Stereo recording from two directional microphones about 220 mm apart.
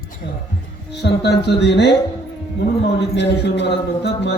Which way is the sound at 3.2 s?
50° left (ahead or behind).